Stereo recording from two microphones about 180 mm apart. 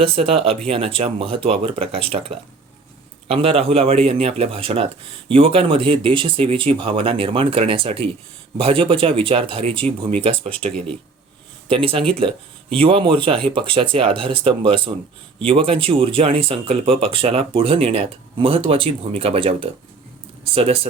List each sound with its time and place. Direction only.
0.0 s speech: 35° right (ahead or behind)
11.7 s speech: 30° right (ahead or behind)